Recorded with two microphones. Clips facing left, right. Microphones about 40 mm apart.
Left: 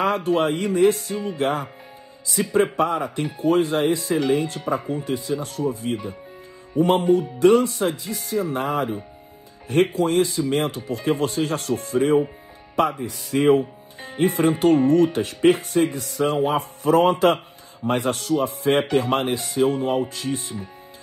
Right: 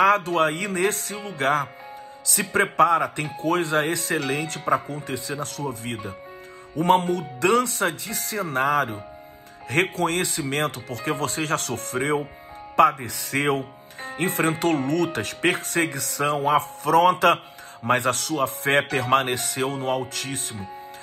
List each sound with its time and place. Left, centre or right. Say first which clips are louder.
0.0 s speech: right 2 dB; right
9.9 s speech: left 4 dB; right